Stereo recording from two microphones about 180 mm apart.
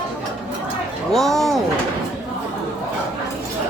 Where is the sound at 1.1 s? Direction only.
Centre (ahead or behind).